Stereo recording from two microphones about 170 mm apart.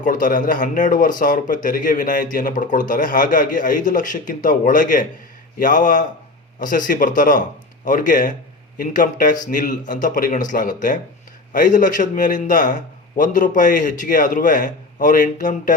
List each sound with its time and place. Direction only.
0.0 s speech: 50° left (ahead or behind)